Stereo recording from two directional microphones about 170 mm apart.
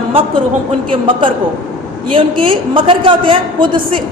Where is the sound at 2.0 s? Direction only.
30° right (ahead or behind).